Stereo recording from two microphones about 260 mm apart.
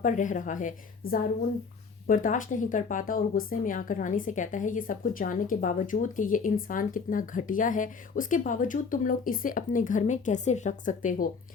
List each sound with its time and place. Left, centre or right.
0.0 s a woman's voice: left